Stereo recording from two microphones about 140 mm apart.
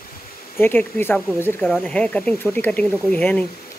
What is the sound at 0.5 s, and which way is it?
Speech, 15° left (ahead or behind).